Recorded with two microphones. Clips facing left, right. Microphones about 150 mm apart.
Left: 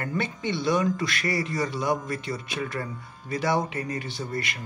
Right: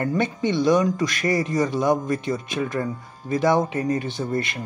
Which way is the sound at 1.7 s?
20° right (ahead or behind).